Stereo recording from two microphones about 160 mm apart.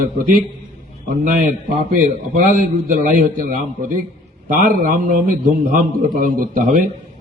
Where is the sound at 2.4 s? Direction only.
55° right (ahead or behind).